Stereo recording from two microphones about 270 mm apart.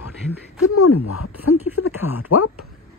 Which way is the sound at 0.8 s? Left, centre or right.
Left.